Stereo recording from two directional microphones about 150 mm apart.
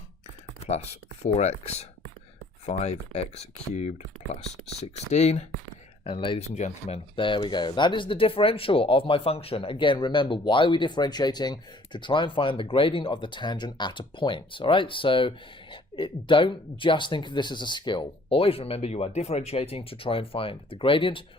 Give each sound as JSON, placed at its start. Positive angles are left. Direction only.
{"t": 0.6, "sound": "speech", "side_deg": 45}
{"t": 6.1, "sound": "speech", "side_deg": 35}